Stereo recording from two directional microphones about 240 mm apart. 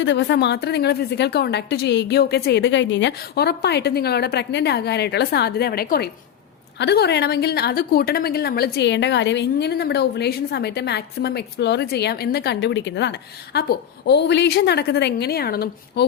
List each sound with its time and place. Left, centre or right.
0.0 s a woman's voice: left